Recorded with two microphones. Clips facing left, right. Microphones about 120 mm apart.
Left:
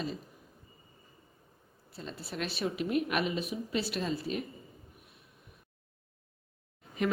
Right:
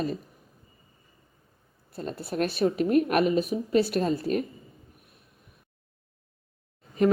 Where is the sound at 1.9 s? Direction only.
50° right (ahead or behind).